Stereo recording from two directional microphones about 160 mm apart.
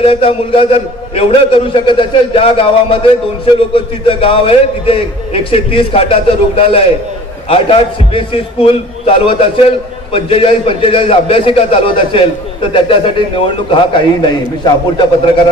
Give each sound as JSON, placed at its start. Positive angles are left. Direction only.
{"t": 0.0, "sound": "a man's voice", "side_deg": 35}